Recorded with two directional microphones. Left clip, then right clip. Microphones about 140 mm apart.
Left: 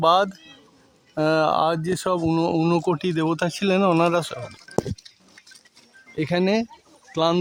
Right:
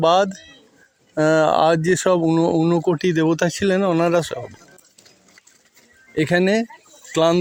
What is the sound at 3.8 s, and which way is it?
Speech, centre (ahead or behind).